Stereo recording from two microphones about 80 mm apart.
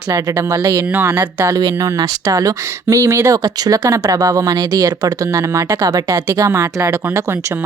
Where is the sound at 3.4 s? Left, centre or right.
Right.